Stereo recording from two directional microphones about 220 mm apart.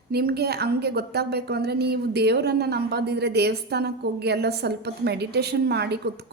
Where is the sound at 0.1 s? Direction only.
45° right (ahead or behind).